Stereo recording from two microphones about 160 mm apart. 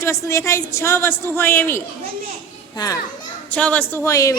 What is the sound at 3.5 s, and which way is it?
Speech, 10° left (ahead or behind).